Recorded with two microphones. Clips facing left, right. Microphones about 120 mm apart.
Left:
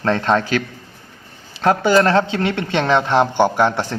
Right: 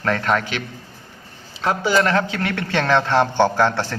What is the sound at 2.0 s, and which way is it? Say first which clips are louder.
A man's voice: left 4 dB; 30° left (ahead or behind).